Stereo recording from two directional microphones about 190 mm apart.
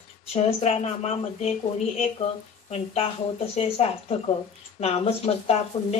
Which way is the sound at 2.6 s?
35° left (ahead or behind).